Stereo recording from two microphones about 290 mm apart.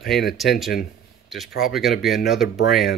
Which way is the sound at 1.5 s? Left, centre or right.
Left.